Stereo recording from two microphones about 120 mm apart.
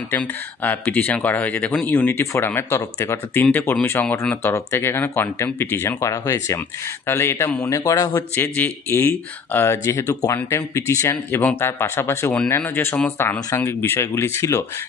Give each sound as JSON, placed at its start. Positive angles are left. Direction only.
{"t": 0.1, "sound": "speech", "side_deg": 15}
{"t": 4.0, "sound": "speech", "side_deg": 10}
{"t": 4.4, "sound": "speech", "side_deg": 20}
{"t": 8.4, "sound": "speech", "side_deg": 15}